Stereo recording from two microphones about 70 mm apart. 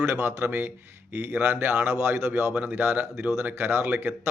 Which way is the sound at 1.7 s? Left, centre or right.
Right.